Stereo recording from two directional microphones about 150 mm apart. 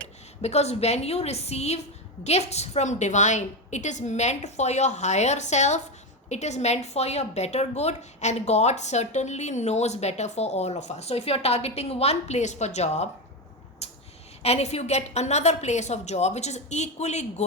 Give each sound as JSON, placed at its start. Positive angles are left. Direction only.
{"t": 0.4, "sound": "a woman's voice", "side_deg": 45}
{"t": 14.4, "sound": "a woman's voice", "side_deg": 45}